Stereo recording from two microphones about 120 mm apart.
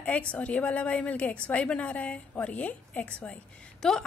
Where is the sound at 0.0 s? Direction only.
10° left (ahead or behind).